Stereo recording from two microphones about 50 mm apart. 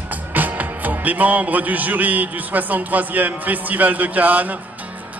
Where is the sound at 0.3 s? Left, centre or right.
Right.